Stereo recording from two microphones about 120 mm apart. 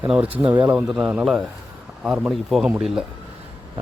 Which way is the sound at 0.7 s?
10° right (ahead or behind).